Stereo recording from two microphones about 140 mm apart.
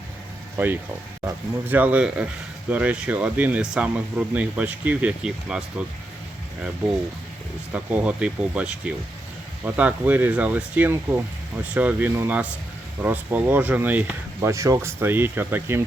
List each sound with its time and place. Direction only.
0.5 s speech: 15° right (ahead or behind)
7.7 s speech: 10° right (ahead or behind)
14.5 s speech: 20° right (ahead or behind)